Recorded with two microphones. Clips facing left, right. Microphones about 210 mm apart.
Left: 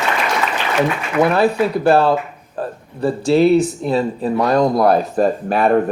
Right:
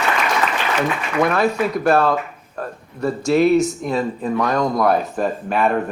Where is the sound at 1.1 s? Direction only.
30° left (ahead or behind).